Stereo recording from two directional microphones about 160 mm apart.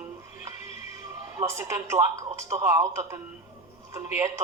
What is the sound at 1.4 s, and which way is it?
Speech, 15° right (ahead or behind).